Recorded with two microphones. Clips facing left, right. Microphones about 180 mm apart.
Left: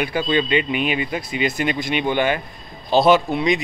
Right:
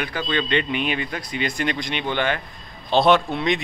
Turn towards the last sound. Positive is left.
turn(degrees=0)  # may be behind; listen again after turning